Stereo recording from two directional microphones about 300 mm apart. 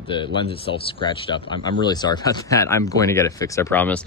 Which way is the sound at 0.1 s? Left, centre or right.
Centre.